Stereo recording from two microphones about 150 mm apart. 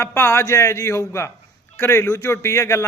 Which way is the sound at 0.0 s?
15° left (ahead or behind).